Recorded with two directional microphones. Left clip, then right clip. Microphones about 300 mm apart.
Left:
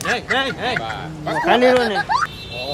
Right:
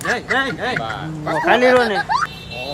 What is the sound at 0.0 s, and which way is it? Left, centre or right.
Speech, centre.